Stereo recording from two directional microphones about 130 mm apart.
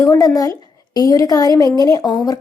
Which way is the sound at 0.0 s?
25° left (ahead or behind).